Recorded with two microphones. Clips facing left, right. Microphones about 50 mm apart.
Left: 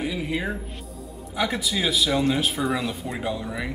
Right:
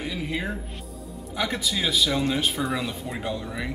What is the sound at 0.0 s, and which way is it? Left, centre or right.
Music, centre.